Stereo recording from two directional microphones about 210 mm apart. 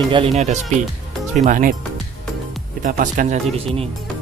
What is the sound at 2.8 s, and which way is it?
Speech, 40° right (ahead or behind).